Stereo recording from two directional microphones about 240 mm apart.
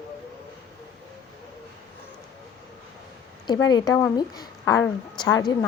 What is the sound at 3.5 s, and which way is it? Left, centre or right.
A woman's voice, centre.